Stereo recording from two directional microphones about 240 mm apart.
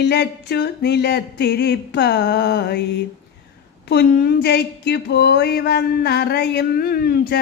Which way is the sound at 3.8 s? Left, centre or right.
Left.